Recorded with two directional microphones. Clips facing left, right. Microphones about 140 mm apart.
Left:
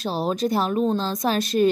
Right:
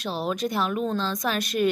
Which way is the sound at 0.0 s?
35° left (ahead or behind).